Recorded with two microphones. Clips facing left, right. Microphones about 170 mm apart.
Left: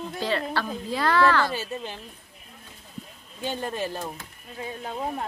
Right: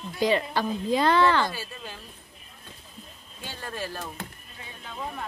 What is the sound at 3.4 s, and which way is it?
Speech, 20° left (ahead or behind).